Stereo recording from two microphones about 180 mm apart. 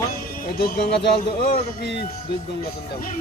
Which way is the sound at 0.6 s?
55° left (ahead or behind).